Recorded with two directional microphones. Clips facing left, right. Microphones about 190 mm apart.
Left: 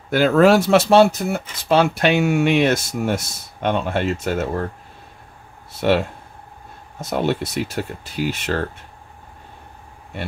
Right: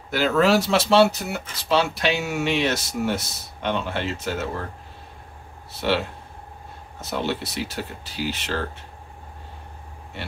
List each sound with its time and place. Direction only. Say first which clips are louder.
0.1 s speech: left 5 dB; 50° left (ahead or behind)
5.8 s speech: left 5 dB; 50° left (ahead or behind)
7.1 s speech: left 5 dB; 50° left (ahead or behind)